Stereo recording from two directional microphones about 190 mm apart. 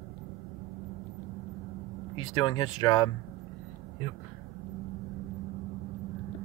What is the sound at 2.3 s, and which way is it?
Speech, 20° left (ahead or behind).